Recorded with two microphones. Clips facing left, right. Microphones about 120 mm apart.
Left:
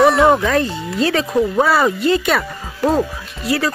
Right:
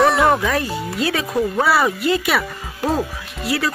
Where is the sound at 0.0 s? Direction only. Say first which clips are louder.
Left 3 dB; centre (ahead or behind).